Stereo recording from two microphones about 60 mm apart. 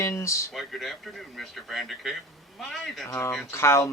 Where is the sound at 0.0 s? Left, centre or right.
Left.